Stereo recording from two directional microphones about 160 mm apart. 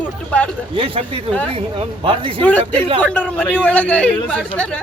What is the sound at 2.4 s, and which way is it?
Speech, 10° left (ahead or behind).